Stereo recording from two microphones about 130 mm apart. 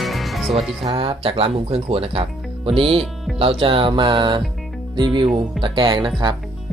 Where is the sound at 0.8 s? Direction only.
50° right (ahead or behind).